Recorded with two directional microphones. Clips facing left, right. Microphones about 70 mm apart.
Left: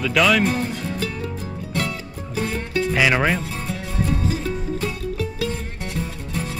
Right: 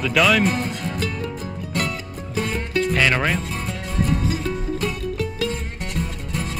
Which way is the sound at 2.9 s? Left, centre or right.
Centre.